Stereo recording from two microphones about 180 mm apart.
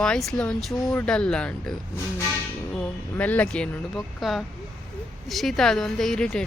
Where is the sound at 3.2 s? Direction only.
10° left (ahead or behind).